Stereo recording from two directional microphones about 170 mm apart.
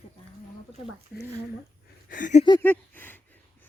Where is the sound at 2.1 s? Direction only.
50° left (ahead or behind).